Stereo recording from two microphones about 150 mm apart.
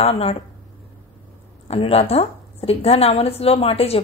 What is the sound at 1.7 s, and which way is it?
A woman's voice, 40° left (ahead or behind).